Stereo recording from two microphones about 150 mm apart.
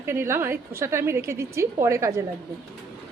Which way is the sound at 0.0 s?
15° right (ahead or behind).